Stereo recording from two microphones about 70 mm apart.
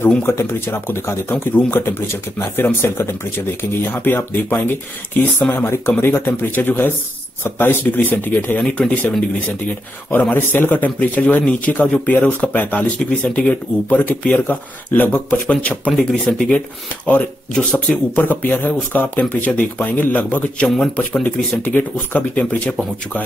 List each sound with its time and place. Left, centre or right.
0.2 s speech: left
8.6 s speech: centre
10.3 s speech: left
15.4 s speech: centre
16.1 s speech: centre
16.5 s speech: centre
20.6 s speech: centre
20.9 s speech: centre